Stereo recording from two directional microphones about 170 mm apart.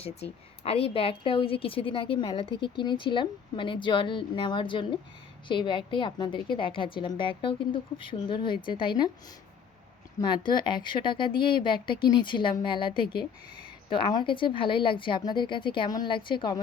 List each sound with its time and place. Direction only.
0.0 s a woman's voice: 35° left (ahead or behind)
10.2 s a woman's voice: 25° left (ahead or behind)